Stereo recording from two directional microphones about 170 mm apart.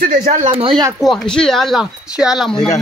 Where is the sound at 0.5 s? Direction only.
30° right (ahead or behind).